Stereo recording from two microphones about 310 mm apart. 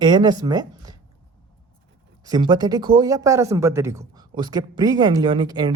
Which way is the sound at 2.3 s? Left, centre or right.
Centre.